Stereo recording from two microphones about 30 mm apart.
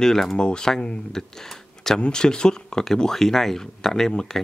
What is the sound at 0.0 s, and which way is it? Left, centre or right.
Speech, centre.